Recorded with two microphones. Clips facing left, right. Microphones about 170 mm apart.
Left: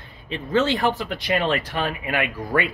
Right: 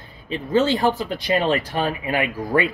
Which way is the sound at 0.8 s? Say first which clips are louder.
Right 2 dB; 35° right (ahead or behind).